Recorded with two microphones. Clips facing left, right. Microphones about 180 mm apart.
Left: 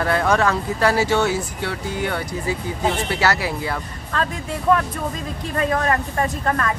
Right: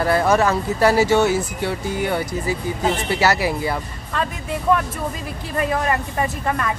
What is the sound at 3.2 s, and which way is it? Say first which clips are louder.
Speech: right 3 dB; 10° right (ahead or behind).